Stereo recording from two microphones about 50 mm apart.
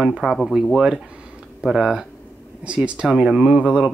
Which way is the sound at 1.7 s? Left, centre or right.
Centre.